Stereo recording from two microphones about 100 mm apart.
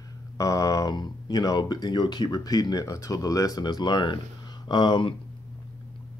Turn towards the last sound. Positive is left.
turn(degrees=50)  # may be behind; listen again after turning